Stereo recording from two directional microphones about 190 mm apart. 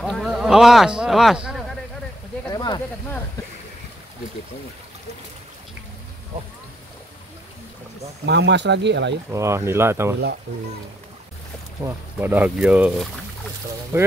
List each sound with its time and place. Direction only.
0.0 s speech: centre (ahead or behind)
2.4 s a sound: 20° left (ahead or behind)
8.3 s speech: 65° right (ahead or behind)
9.3 s speech: 15° right (ahead or behind)
11.8 s speech: 10° right (ahead or behind)
13.9 s speech: 15° right (ahead or behind)